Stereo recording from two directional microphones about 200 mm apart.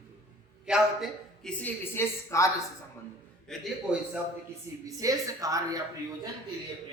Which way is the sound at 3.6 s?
5° right (ahead or behind).